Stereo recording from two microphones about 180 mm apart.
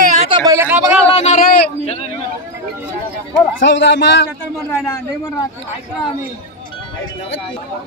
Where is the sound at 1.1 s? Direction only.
40° left (ahead or behind).